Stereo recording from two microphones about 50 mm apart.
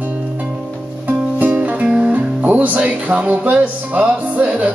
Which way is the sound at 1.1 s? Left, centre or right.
Right.